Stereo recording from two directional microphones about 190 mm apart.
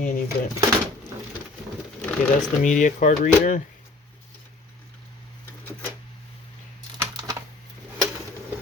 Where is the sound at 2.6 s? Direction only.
40° left (ahead or behind).